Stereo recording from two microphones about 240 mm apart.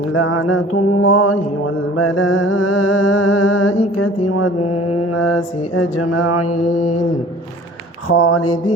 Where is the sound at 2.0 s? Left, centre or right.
Left.